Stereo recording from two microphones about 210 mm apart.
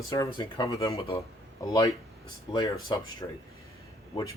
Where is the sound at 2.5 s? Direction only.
20° left (ahead or behind).